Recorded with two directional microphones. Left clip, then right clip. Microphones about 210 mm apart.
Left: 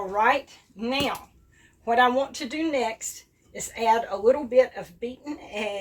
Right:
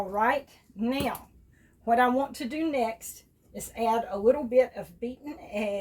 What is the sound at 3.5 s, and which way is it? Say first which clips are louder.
A woman's voice: left 5 dB; 25° right (ahead or behind).